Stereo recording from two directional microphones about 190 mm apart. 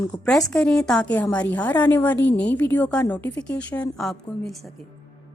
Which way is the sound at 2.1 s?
70° left (ahead or behind).